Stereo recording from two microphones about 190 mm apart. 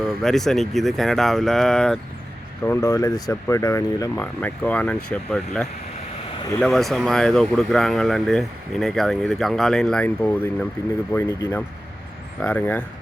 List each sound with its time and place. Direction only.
0.0 s speech: centre (ahead or behind)
2.6 s speech: 15° left (ahead or behind)
11.1 s speech: 15° left (ahead or behind)